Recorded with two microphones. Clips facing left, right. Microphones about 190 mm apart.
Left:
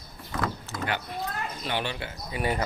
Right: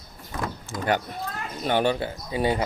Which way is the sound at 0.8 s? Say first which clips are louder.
Right 6 dB; 45° right (ahead or behind).